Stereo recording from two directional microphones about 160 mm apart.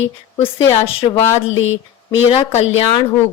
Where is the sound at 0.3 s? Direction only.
40° left (ahead or behind).